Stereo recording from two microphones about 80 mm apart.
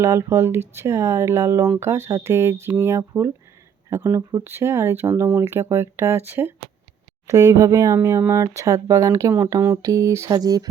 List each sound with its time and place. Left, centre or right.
0.0 s speech: right
4.4 s speech: right
7.3 s speech: right
7.9 s speech: right
9.8 s speech: right